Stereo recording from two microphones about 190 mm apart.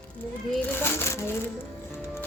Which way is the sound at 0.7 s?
10° left (ahead or behind).